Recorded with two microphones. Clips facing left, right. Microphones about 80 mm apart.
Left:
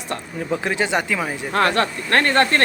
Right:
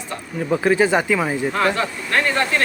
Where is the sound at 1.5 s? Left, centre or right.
Left.